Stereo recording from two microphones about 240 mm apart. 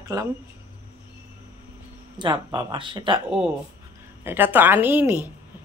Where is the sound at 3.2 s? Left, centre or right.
Centre.